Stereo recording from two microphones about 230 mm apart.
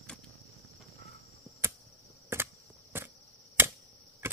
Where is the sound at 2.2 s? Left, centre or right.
Centre.